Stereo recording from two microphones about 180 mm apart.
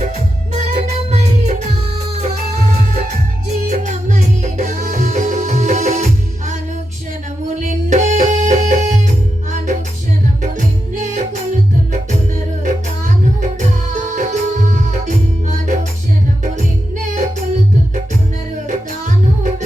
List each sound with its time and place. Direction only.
0.5 s music: 40° right (ahead or behind)
7.6 s music: 40° right (ahead or behind)
13.4 s music: 45° right (ahead or behind)
18.7 s music: 45° right (ahead or behind)